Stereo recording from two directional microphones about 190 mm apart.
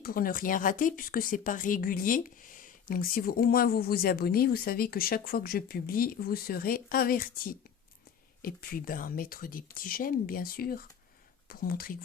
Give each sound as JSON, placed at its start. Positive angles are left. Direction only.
{"t": 0.0, "sound": "speech", "side_deg": 50}